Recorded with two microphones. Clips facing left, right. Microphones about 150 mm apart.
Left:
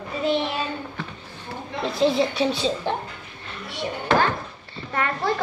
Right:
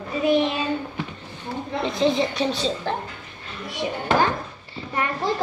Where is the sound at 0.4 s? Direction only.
15° right (ahead or behind).